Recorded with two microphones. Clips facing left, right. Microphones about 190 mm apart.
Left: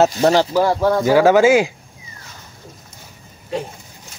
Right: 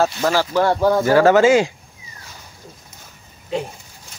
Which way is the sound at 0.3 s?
20° left (ahead or behind).